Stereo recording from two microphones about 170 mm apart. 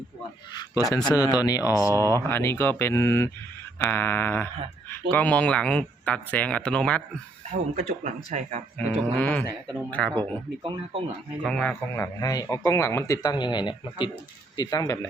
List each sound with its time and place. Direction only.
1.0 s speech: 20° left (ahead or behind)
1.9 s speech: 20° right (ahead or behind)
2.2 s speech: 15° left (ahead or behind)
7.8 s speech: 45° right (ahead or behind)
9.1 s speech: 10° left (ahead or behind)
10.6 s speech: 30° right (ahead or behind)
11.4 s speech: 5° left (ahead or behind)
12.2 s speech: 20° left (ahead or behind)